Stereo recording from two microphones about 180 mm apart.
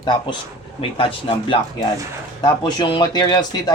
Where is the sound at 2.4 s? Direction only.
25° left (ahead or behind).